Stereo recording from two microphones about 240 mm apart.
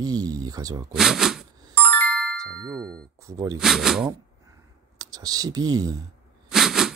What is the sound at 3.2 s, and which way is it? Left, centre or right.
Speech, centre.